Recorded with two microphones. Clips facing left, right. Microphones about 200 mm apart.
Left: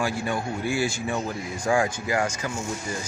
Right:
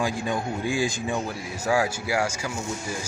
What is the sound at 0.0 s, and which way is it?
Speech, 15° right (ahead or behind).